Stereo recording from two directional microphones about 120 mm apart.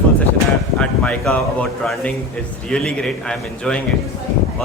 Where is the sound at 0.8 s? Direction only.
5° left (ahead or behind).